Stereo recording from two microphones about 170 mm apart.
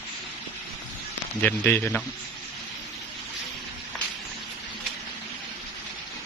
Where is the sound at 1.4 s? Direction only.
10° left (ahead or behind).